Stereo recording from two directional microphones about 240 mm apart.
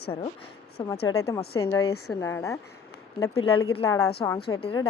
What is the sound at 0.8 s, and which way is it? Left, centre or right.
A woman's voice, centre.